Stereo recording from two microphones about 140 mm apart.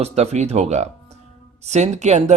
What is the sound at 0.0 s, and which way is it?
A man's voice, 50° right (ahead or behind).